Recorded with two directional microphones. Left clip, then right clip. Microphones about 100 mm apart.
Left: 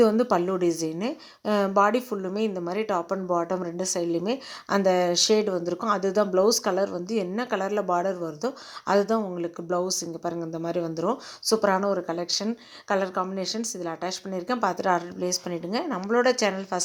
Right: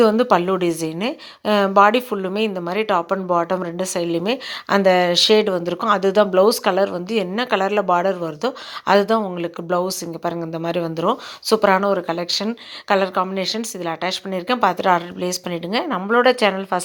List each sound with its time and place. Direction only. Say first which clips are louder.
0.0 s a woman's voice: right 6 dB; 15° right (ahead or behind)